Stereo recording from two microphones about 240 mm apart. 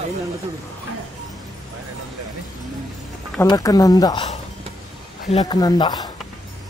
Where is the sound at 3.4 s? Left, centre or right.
Centre.